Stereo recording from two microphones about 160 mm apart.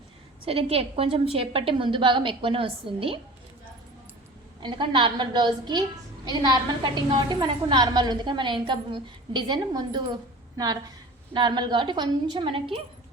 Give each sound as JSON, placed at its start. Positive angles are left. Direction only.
{"t": 0.4, "sound": "a woman's voice", "side_deg": -35}
{"t": 4.6, "sound": "a woman's voice", "side_deg": -30}
{"t": 11.3, "sound": "a woman's voice", "side_deg": -30}